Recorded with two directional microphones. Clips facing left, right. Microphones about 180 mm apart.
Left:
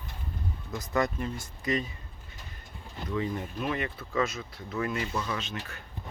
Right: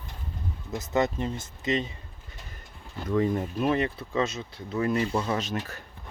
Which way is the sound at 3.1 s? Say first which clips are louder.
Right 7 dB; 45° right (ahead or behind).